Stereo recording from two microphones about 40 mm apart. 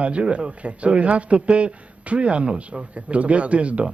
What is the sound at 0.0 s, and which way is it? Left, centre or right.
Speech, right.